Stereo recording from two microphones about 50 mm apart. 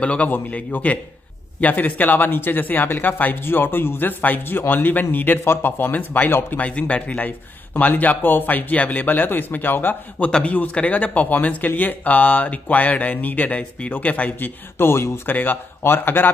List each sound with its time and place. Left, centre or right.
0.0 s speech: left
7.7 s a man's voice: left
14.8 s speech: left
15.3 s speech: left